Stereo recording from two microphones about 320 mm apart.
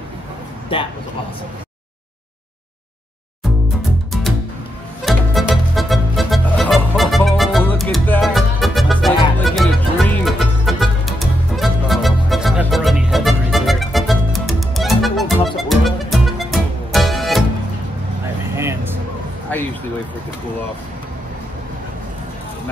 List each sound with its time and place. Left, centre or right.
0.7 s a man's voice: centre
5.0 s music: centre
18.5 s vehicle: centre